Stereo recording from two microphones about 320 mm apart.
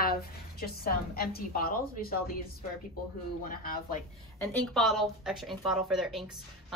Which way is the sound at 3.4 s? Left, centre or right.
Left.